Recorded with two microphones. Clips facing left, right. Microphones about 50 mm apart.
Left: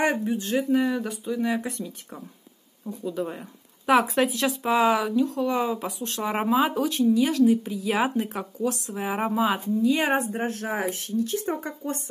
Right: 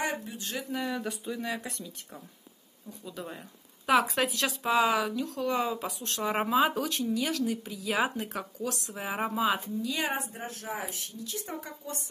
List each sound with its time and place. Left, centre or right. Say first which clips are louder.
0.0 s speech: left 9 dB; left
0.8 s speech: left 6 dB; centre
1.4 s speech: left 8 dB; centre
9.8 s speech: left 9 dB; left
10.3 s speech: left 9 dB; left